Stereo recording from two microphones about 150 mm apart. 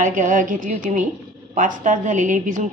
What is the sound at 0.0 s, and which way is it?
A woman's voice, 55° right (ahead or behind).